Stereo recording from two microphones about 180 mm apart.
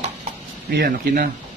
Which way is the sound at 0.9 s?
50° right (ahead or behind).